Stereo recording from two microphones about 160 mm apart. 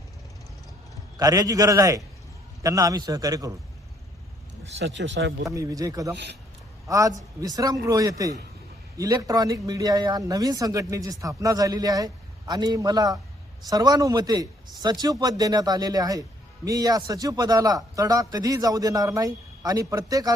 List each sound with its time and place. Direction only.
1.2 s a man's voice: 20° right (ahead or behind)
4.8 s a man's voice: 90° right
5.5 s a man's voice: 20° right (ahead or behind)